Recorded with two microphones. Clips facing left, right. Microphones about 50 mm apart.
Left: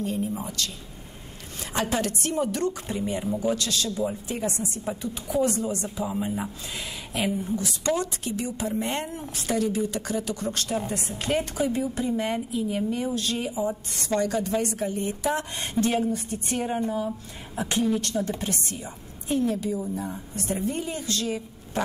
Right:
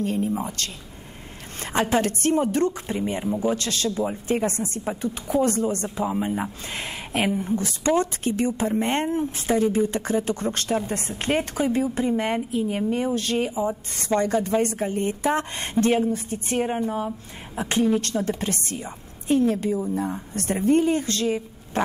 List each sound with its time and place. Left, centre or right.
0.0 s a woman's voice: right
6.7 s a woman's voice: right